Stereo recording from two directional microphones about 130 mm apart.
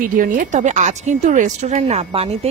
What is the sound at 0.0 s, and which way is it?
A woman's voice, 90° right.